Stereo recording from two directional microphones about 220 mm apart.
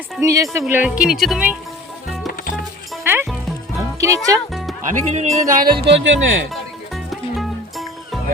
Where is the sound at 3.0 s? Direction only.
10° right (ahead or behind).